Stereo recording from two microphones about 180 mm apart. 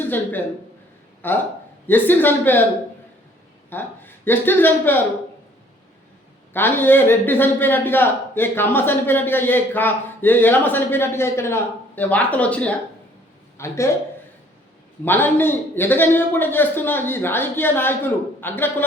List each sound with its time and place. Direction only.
0.1 s a man's voice: 10° left (ahead or behind)
3.7 s a man's voice: 10° left (ahead or behind)
6.5 s a man's voice: 10° left (ahead or behind)
15.0 s a man's voice: 10° left (ahead or behind)